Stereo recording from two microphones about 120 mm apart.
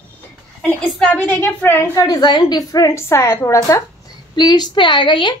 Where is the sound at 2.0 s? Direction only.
35° left (ahead or behind).